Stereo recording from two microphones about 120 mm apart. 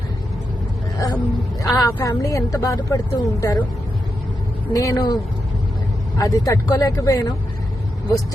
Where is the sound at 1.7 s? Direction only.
30° left (ahead or behind).